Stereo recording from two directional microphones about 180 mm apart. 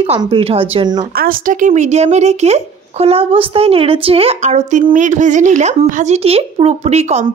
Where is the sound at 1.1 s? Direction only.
50° right (ahead or behind).